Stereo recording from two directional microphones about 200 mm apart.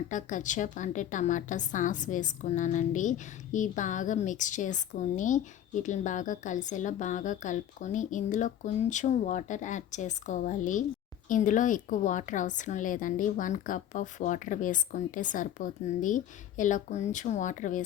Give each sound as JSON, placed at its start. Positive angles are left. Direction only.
{"t": 0.1, "sound": "a woman's voice", "side_deg": 40}